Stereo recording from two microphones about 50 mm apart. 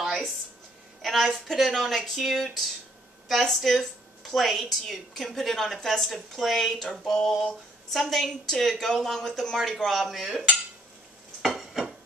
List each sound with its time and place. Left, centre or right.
0.0 s a sound: centre
1.0 s a woman's voice: centre
11.4 s dishes: centre